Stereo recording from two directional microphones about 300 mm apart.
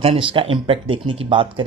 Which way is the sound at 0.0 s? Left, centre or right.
Centre.